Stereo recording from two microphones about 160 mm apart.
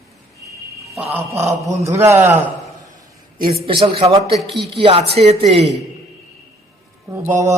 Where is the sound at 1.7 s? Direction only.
15° right (ahead or behind).